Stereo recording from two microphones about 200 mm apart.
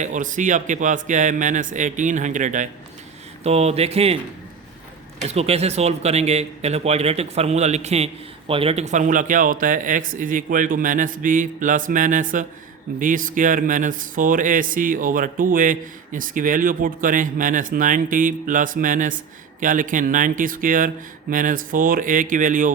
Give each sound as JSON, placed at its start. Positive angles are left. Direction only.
{"t": 0.0, "sound": "speech", "side_deg": -40}
{"t": 5.3, "sound": "speech", "side_deg": -30}